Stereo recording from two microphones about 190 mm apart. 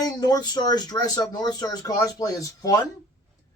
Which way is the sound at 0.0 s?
20° left (ahead or behind).